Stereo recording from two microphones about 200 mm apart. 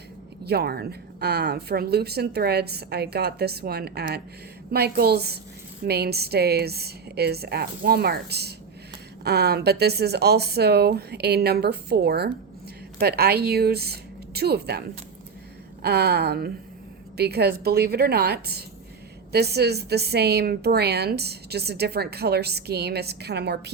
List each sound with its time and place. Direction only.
0.4 s speech: 50° right (ahead or behind)